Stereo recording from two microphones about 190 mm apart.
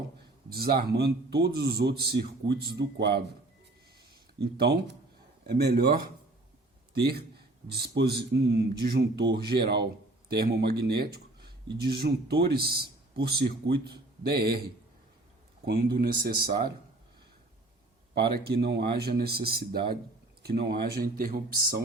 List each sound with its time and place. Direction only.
0.5 s a man's voice: 55° right (ahead or behind)
4.5 s a man's voice: 60° right (ahead or behind)
7.1 s a man's voice: 55° right (ahead or behind)
18.4 s a man's voice: 60° right (ahead or behind)